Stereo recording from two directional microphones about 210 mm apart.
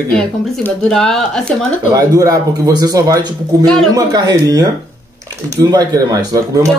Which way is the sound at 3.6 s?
Centre (ahead or behind).